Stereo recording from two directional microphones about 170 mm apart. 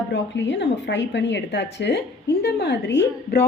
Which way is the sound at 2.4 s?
80° left.